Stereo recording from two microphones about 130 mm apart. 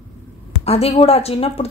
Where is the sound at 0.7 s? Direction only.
50° left (ahead or behind).